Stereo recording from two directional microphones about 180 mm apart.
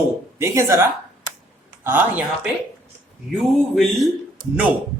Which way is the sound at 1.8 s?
10° right (ahead or behind).